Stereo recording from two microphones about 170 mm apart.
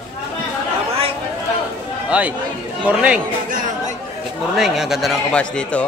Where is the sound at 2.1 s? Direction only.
5° right (ahead or behind).